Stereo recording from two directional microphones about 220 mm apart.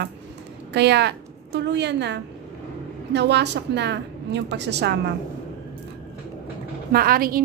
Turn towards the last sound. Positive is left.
turn(degrees=-40)  # may be behind; listen again after turning